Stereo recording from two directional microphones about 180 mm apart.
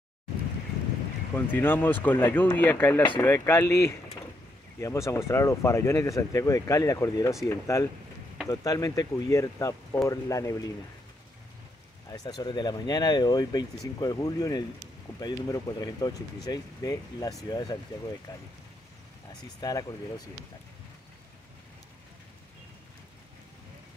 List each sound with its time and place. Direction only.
1.3 s speech: 10° left (ahead or behind)
12.1 s speech: 20° left (ahead or behind)
19.6 s speech: 20° left (ahead or behind)